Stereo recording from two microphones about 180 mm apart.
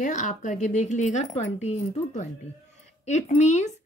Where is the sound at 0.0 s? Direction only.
45° left (ahead or behind).